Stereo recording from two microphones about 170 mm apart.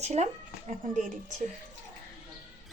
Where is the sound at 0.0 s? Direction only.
40° right (ahead or behind).